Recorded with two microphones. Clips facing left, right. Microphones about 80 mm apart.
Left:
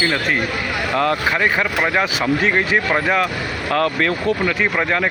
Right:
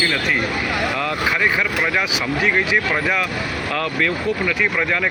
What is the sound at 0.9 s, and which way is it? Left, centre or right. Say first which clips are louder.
Speech: left 3 dB; left.